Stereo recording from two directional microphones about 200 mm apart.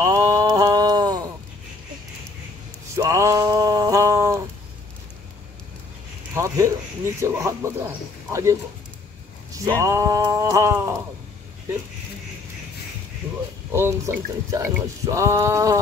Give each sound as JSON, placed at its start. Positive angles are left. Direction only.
{"t": 0.0, "sound": "a sound", "side_deg": -15}
{"t": 3.0, "sound": "male singing", "side_deg": -15}
{"t": 6.3, "sound": "a sound", "side_deg": -15}
{"t": 7.2, "sound": "speech", "side_deg": -15}
{"t": 9.8, "sound": "speech", "side_deg": -15}
{"t": 13.7, "sound": "speech", "side_deg": -15}